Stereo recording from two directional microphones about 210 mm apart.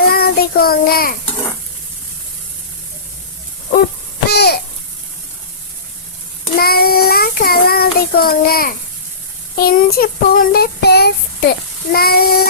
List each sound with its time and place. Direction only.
0.1 s child singing: 45° left (ahead or behind)
4.3 s babbling: 50° left (ahead or behind)
6.6 s child singing: 45° left (ahead or behind)